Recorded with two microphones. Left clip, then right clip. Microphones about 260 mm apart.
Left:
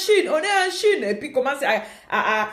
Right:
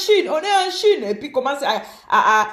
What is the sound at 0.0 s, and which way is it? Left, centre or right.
A woman's voice, centre.